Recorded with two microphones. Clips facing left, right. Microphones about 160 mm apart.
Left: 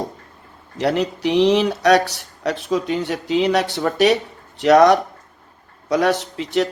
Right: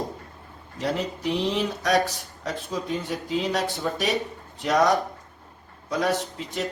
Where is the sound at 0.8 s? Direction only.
75° left (ahead or behind).